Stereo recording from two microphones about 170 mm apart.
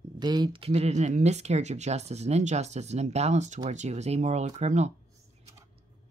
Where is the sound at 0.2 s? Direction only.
25° right (ahead or behind); by 4.9 s 40° right (ahead or behind).